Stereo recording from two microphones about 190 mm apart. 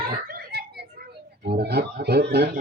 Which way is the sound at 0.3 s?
55° right (ahead or behind).